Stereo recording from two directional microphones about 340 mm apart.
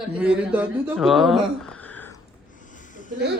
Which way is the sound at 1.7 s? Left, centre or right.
Centre.